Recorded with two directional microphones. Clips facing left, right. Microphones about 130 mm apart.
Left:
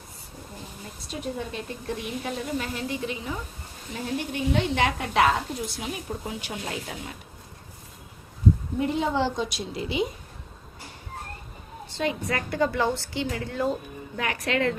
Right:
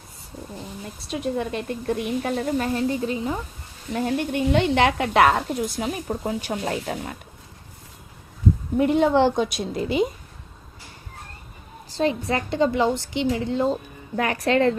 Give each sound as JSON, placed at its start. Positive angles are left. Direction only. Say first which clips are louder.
{"t": 1.4, "sound": "a woman's voice", "louder": "right 7 dB", "side_deg": -60}
{"t": 3.9, "sound": "a woman's voice", "louder": "right 6 dB", "side_deg": -60}
{"t": 8.9, "sound": "a woman's voice", "louder": "right 8 dB", "side_deg": -65}
{"t": 11.9, "sound": "a woman's voice", "louder": "right 5 dB", "side_deg": -35}
{"t": 14.2, "sound": "a woman's voice", "louder": "right 6 dB", "side_deg": -35}